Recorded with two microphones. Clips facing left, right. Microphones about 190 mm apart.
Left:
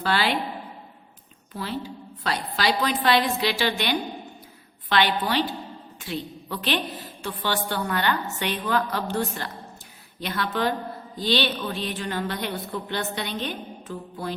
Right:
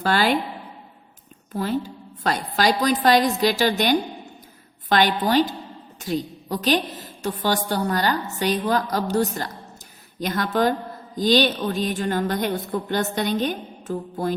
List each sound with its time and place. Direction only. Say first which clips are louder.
0.0 s a woman's voice: right 4 dB; 45° right (ahead or behind)
1.5 s a woman's voice: right 6 dB; 45° right (ahead or behind)